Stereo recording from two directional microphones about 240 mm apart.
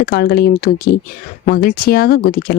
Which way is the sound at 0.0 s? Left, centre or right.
Left.